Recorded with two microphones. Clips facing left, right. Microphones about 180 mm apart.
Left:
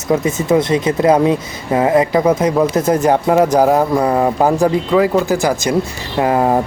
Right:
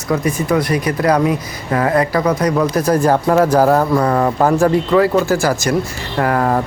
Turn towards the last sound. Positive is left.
turn(degrees=20)  # may be behind; listen again after turning